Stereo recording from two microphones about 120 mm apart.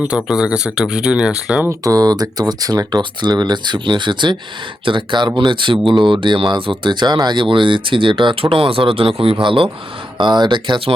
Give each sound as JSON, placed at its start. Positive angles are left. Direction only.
{"t": 0.3, "sound": "speech", "side_deg": -5}
{"t": 1.6, "sound": "speech", "side_deg": -30}